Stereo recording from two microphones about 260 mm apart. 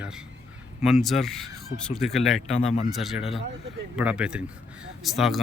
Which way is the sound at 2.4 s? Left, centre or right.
Left.